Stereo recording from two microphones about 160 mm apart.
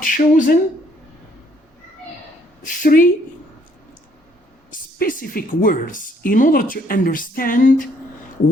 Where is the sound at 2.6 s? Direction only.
60° left (ahead or behind).